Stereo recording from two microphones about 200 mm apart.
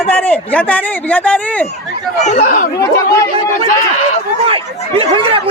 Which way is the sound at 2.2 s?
40° left (ahead or behind).